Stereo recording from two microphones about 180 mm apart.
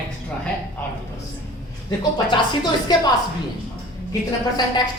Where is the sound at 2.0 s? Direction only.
25° left (ahead or behind).